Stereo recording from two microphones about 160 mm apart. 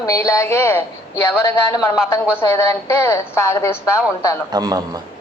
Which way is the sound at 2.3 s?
15° left (ahead or behind).